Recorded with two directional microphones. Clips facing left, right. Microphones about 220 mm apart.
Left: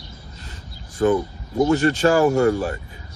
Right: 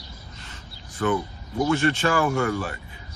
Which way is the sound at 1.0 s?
35° left (ahead or behind).